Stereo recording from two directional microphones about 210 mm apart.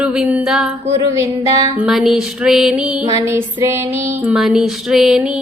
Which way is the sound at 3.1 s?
15° right (ahead or behind).